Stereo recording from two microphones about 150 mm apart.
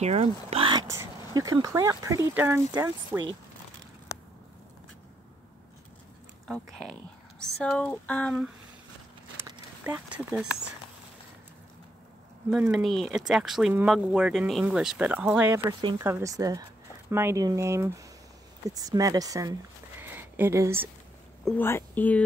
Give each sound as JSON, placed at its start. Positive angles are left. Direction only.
{"t": 0.0, "sound": "speech", "side_deg": -45}
{"t": 0.8, "sound": "speech", "side_deg": -20}
{"t": 6.4, "sound": "speech", "side_deg": 0}
{"t": 9.9, "sound": "speech", "side_deg": -10}
{"t": 12.4, "sound": "speech", "side_deg": -10}
{"t": 20.0, "sound": "a sound", "side_deg": -15}
{"t": 21.5, "sound": "speech", "side_deg": 15}